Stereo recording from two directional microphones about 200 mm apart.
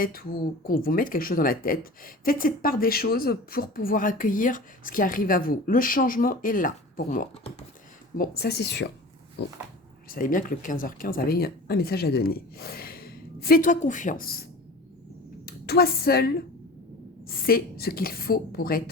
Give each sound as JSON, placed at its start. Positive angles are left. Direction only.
{"t": 0.0, "sound": "speech", "side_deg": 45}
{"t": 10.1, "sound": "speech", "side_deg": 45}
{"t": 15.4, "sound": "a woman's voice", "side_deg": 50}